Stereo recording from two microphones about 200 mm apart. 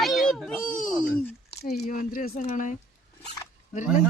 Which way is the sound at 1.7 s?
40° left (ahead or behind).